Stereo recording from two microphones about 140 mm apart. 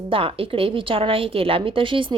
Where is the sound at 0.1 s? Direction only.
40° right (ahead or behind).